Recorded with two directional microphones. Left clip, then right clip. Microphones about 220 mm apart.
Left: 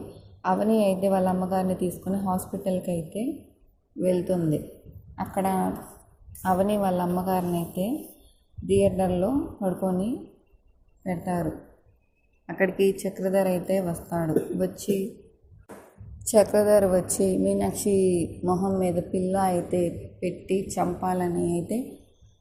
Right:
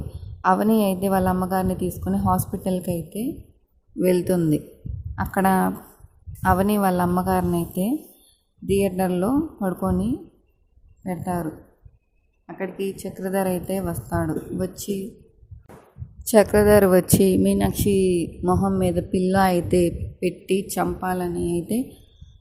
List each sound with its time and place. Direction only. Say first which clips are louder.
0.4 s a woman's voice: right 3 dB; 30° right (ahead or behind)
12.5 s a woman's voice: left 6 dB; centre (ahead or behind)
13.2 s a woman's voice: left 1 dB; 25° right (ahead or behind)
16.1 s a woman's voice: right 3 dB; 30° right (ahead or behind)
21.0 s a woman's voice: right 1 dB; 20° right (ahead or behind)